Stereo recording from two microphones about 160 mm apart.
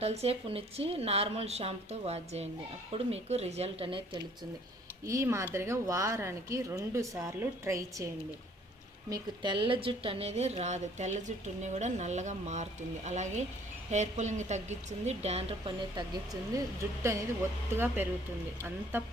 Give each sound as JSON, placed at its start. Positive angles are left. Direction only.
{"t": 0.0, "sound": "speech", "side_deg": -40}
{"t": 5.0, "sound": "a woman's voice", "side_deg": -20}
{"t": 16.5, "sound": "speech", "side_deg": -20}